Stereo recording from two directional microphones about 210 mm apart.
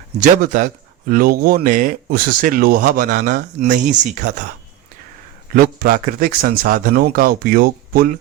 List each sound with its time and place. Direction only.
0.2 s speech: 40° right (ahead or behind)
5.5 s speech: 45° right (ahead or behind)